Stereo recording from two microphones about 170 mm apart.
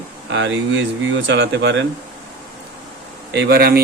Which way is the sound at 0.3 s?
90° right.